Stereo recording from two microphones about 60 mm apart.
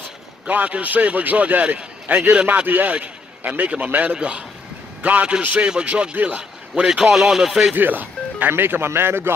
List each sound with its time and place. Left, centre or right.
0.5 s a man's voice: right; by 7.7 s centre
7.7 s speech: right